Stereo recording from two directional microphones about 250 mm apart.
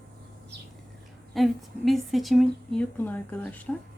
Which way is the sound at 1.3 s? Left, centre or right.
Centre.